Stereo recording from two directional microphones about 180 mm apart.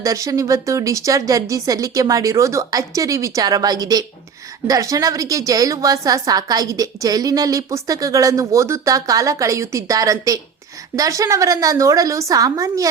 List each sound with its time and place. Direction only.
0.0 s a woman's voice: 20° right (ahead or behind)